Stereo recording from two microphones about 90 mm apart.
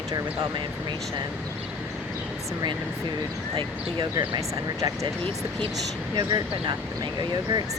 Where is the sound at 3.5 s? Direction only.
50° right (ahead or behind).